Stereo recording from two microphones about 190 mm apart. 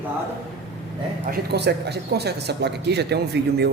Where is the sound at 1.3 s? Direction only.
60° right (ahead or behind).